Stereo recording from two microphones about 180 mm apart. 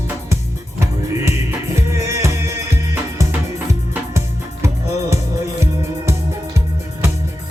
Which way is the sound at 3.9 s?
15° right (ahead or behind).